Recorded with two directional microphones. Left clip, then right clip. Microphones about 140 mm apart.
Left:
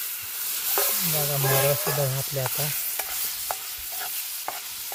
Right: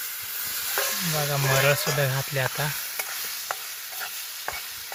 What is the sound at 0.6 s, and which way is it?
Stir, 45° left (ahead or behind).